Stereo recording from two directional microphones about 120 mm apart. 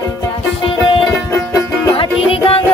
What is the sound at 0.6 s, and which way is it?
Music, 45° left (ahead or behind).